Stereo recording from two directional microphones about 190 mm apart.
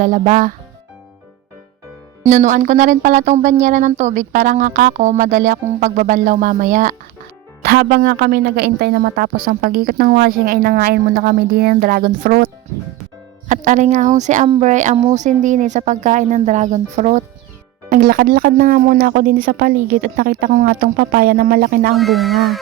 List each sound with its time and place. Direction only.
0.0 s speech: 45° right (ahead or behind)
2.2 s speech: 40° right (ahead or behind)
13.5 s speech: 40° right (ahead or behind)
21.9 s speech: centre (ahead or behind)